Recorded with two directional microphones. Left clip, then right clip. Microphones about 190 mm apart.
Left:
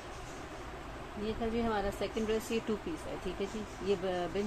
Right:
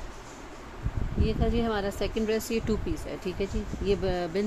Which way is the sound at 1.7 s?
55° right (ahead or behind).